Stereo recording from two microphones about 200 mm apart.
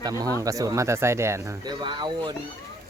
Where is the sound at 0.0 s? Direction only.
20° right (ahead or behind).